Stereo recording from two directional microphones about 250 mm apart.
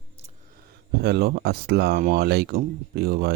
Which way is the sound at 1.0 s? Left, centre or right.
Right.